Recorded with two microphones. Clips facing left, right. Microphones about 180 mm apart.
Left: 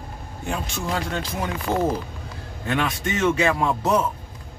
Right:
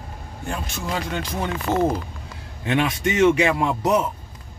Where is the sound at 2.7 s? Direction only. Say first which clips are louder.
Right 3 dB; 25° right (ahead or behind).